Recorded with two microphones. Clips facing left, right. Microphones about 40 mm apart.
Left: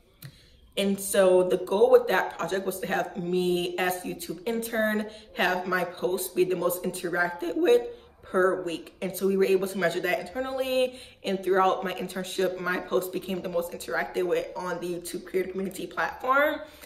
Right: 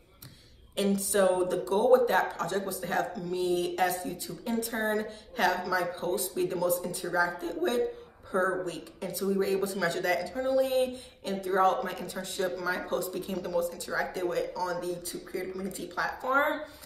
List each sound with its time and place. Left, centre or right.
0.7 s speech: left